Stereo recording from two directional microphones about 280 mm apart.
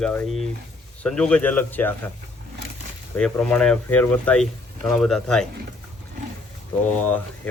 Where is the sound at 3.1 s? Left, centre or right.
Centre.